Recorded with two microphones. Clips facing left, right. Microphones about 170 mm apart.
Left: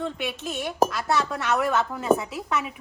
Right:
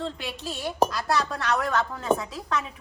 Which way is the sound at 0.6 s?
Centre (ahead or behind).